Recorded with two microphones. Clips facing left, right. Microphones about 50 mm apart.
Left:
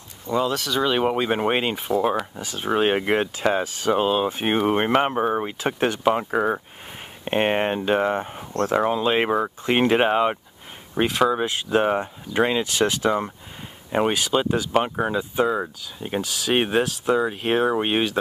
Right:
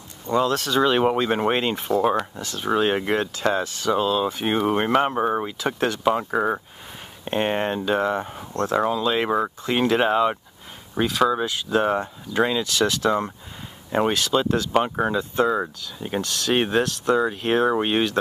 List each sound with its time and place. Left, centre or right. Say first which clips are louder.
0.3 s speech: right 2 dB; centre
2.4 s speech: left 1 dB; centre
6.3 s speech: even; centre
7.2 s speech: left 2 dB; left
11.8 s speech: even; centre